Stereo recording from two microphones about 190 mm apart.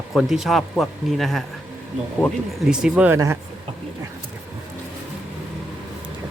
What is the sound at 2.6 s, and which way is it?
Speech, 5° right (ahead or behind).